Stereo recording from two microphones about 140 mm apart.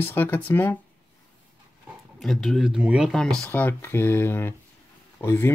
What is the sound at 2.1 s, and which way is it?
Speech, centre (ahead or behind).